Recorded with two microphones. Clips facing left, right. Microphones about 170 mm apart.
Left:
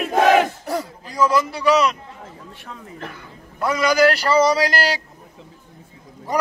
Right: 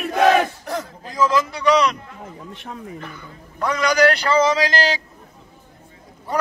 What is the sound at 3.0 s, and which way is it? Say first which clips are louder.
Speech: left 1 dB; 75° left (ahead or behind).